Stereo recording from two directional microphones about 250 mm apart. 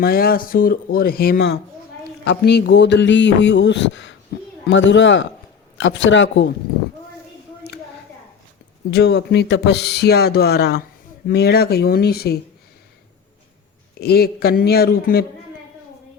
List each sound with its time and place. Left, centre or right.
0.0 s speech: left
8.9 s speech: left
14.0 s speech: left